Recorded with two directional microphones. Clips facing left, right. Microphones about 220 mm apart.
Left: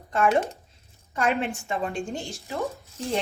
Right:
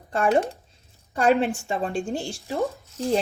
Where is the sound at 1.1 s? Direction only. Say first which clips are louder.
Right 5 dB; 35° right (ahead or behind).